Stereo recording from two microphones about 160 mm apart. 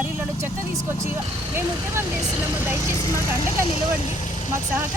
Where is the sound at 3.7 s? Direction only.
45° left (ahead or behind).